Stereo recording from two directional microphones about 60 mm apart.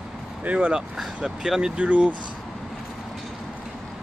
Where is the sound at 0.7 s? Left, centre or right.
Centre.